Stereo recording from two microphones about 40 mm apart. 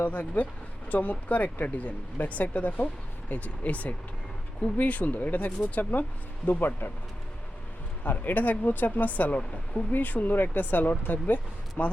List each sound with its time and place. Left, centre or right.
0.0 s speech: left
8.0 s speech: left